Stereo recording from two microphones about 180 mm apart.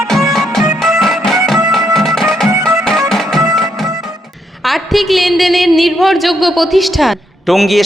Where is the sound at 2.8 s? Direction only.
Centre (ahead or behind).